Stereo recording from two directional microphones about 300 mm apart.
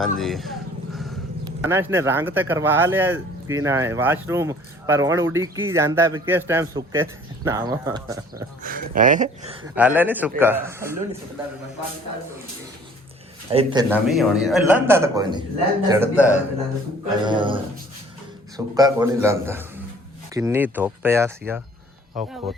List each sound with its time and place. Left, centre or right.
0.0 s vehicle: centre
1.6 s speech: centre
8.6 s speech: right
9.7 s speech: centre
13.5 s speech: centre
13.9 s a man's voice: centre
17.2 s a man's voice: centre